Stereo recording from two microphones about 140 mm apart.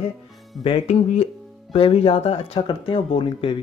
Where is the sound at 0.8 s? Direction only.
50° left (ahead or behind).